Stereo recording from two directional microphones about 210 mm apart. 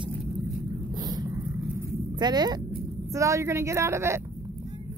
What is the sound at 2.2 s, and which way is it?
Speech, 20° right (ahead or behind).